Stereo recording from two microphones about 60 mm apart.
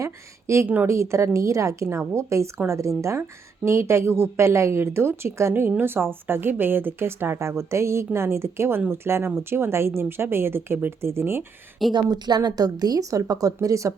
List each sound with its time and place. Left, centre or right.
0.0 s a woman's voice: right
3.2 s a woman's voice: right
12.0 s a woman's voice: right